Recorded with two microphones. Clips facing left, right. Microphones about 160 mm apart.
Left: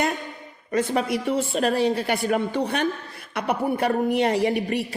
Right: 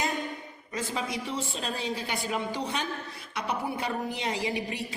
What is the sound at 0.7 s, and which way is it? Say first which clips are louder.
A woman's voice: left 10 dB; 60° left (ahead or behind).